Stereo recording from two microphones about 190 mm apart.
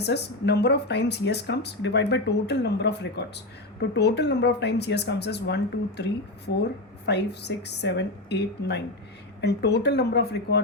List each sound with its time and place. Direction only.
0.0 s speech: 60° left (ahead or behind)